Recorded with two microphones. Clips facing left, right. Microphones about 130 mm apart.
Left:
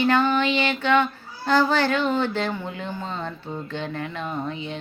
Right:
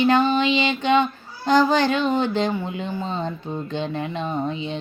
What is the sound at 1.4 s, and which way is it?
Speech, 15° right (ahead or behind).